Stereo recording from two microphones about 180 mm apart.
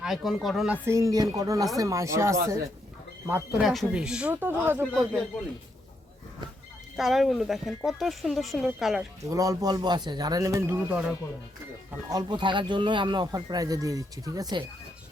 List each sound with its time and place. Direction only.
0.0 s speech: centre (ahead or behind)
0.9 s speech: 15° right (ahead or behind)
4.9 s speech: centre (ahead or behind)
6.9 s speech: centre (ahead or behind)
9.3 s speech: 20° right (ahead or behind)
12.1 s speech: 25° right (ahead or behind)